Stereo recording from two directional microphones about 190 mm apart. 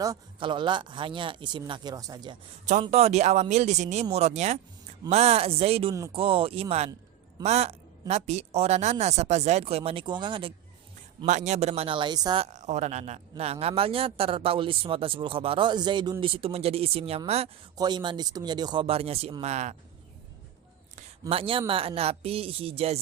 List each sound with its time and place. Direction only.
0.0 s a man's voice: 20° right (ahead or behind)
2.8 s a woman's voice: 30° right (ahead or behind)
11.3 s a woman's voice: 40° right (ahead or behind); by 12.5 s 20° right (ahead or behind)
12.5 s a man's voice: 40° right (ahead or behind)
17.7 s a man's voice: 20° right (ahead or behind)
20.9 s a sound: 30° right (ahead or behind)
21.7 s a woman's voice: 30° right (ahead or behind)